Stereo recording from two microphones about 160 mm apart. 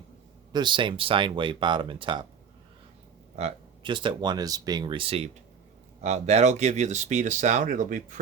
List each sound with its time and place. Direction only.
0.5 s speech: 30° right (ahead or behind)
3.3 s speech: 35° right (ahead or behind); by 8.2 s 55° right (ahead or behind)